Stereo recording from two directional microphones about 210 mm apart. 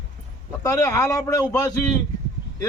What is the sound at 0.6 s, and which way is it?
Speech, 15° left (ahead or behind).